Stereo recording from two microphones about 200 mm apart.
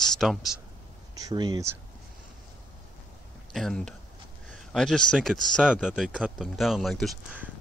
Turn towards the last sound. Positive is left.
turn(degrees=-5)  # may be behind; listen again after turning